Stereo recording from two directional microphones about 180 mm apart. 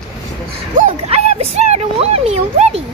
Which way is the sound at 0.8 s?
40° right (ahead or behind).